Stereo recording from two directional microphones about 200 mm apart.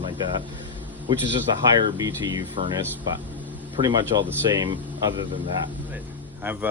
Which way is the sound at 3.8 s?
25° right (ahead or behind).